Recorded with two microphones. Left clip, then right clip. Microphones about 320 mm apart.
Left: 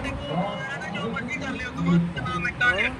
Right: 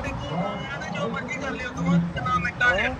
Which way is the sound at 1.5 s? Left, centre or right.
Centre.